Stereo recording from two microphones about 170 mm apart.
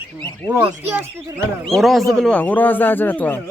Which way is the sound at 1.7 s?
Centre (ahead or behind).